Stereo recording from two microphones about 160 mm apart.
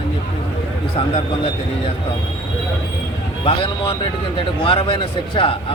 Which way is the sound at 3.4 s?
35° left (ahead or behind).